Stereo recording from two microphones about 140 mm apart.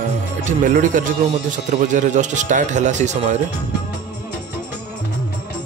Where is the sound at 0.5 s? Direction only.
65° right (ahead or behind).